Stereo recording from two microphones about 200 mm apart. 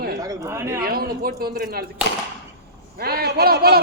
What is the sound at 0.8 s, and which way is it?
A man's voice, 50° right (ahead or behind).